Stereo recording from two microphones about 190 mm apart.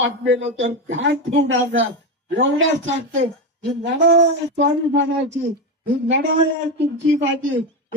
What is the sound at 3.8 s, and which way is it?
A man's voice, 75° right (ahead or behind).